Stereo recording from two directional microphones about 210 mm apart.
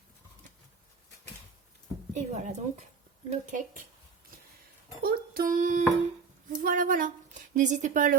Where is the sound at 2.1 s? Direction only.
35° right (ahead or behind).